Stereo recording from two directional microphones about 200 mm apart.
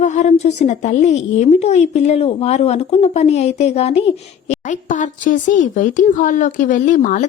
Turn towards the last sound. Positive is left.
turn(degrees=40)  # may be behind; listen again after turning